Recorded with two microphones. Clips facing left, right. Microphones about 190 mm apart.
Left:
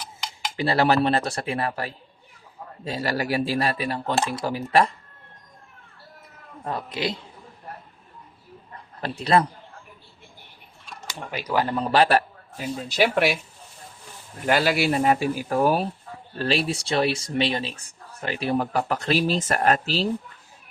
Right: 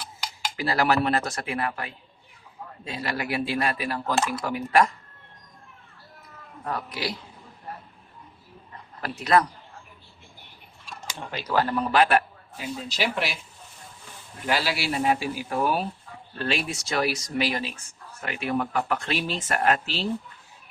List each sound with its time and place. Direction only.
0.5 s a woman's voice: 30° left (ahead or behind)
6.7 s a woman's voice: 25° left (ahead or behind)
9.0 s a woman's voice: 30° left (ahead or behind)
11.3 s speech: 10° left (ahead or behind)
11.8 s a man's voice: 35° left (ahead or behind)
12.9 s speech: 55° left (ahead or behind)
14.4 s speech: 50° left (ahead or behind)